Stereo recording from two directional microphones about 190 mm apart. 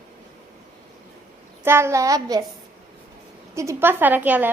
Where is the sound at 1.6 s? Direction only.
15° right (ahead or behind).